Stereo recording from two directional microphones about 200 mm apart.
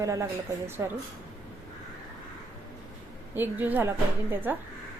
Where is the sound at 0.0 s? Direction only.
15° right (ahead or behind).